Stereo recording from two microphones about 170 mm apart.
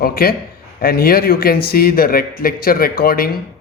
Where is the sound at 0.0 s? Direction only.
60° left (ahead or behind).